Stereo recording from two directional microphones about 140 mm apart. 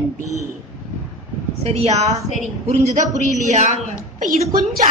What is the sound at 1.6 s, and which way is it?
A woman's voice, 50° right (ahead or behind).